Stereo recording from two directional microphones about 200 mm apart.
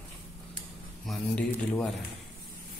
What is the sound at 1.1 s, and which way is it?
Speech, 5° left (ahead or behind).